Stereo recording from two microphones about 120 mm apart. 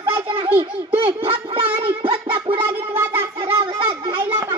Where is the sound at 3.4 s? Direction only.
45° right (ahead or behind).